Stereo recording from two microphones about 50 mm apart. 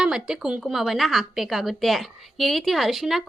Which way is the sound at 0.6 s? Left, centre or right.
Centre.